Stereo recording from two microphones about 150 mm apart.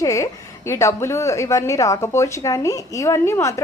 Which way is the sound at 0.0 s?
20° left (ahead or behind).